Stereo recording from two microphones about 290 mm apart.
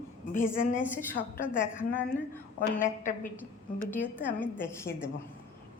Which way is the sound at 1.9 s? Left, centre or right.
Centre.